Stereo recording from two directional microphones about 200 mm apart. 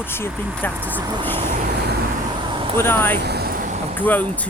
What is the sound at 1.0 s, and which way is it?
Speech, 20° right (ahead or behind).